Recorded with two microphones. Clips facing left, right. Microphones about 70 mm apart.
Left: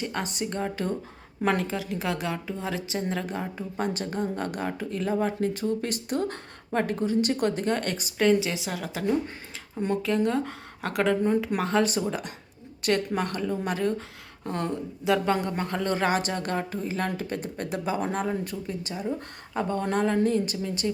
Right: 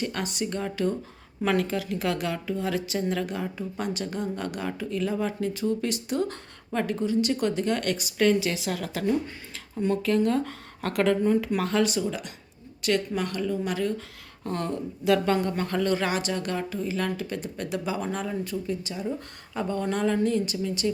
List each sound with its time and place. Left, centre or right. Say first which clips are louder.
0.0 s speech: right 1 dB; left
1.5 s speech: right 2 dB; left
3.8 s speech: left 3 dB; left
14.4 s speech: even; centre
15.9 s speech: left 1 dB; left